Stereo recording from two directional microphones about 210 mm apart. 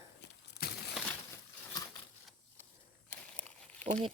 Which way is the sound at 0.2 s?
55° left (ahead or behind).